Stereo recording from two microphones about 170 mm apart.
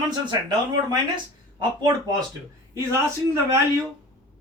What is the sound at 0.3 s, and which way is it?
Speech, 25° right (ahead or behind).